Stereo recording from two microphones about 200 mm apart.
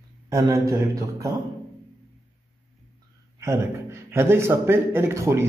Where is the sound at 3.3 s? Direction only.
15° right (ahead or behind).